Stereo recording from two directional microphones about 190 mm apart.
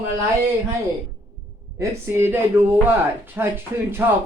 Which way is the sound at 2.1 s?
10° right (ahead or behind).